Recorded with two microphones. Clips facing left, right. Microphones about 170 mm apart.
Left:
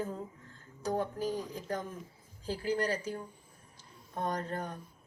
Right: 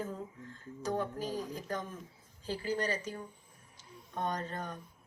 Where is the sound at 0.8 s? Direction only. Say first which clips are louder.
Left 1 dB; 35° left (ahead or behind).